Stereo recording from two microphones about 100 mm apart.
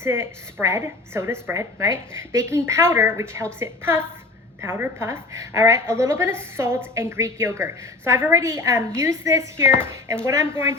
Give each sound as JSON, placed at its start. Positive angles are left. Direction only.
{"t": 0.0, "sound": "a woman's voice", "side_deg": -25}